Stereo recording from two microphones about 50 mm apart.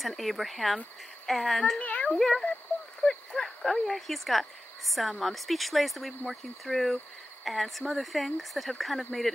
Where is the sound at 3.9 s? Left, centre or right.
Centre.